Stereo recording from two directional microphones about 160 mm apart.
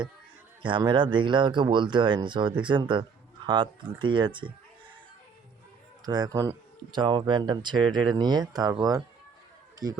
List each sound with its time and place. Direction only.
0.6 s speech: 30° right (ahead or behind)
6.1 s speech: 25° right (ahead or behind)